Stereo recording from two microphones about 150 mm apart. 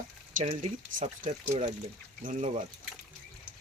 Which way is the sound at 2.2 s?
65° right (ahead or behind).